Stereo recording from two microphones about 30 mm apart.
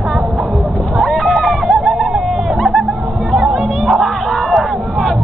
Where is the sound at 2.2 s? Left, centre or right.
Centre.